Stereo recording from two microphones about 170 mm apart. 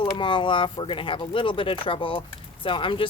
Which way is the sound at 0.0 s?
30° left (ahead or behind).